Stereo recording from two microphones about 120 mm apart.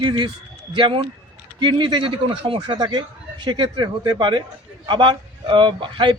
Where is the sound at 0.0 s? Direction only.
40° right (ahead or behind).